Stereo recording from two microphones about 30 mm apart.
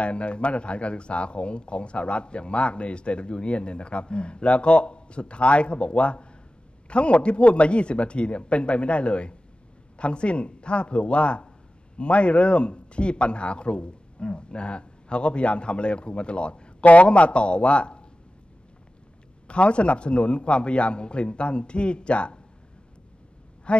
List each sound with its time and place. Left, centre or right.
0.0 s speech: left
16.8 s speech: left
19.4 s speech: left
23.7 s speech: left